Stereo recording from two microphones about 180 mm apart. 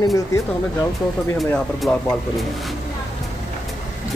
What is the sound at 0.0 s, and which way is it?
Speech, 20° left (ahead or behind).